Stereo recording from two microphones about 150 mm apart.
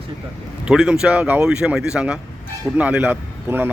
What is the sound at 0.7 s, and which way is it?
Speech, 5° right (ahead or behind).